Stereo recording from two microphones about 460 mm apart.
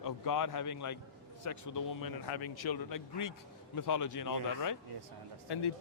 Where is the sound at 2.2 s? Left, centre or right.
Left.